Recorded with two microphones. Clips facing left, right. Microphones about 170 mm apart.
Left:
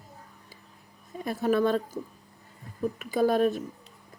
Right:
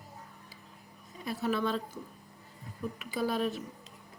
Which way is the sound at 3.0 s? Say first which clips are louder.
Left 8 dB; 50° left (ahead or behind).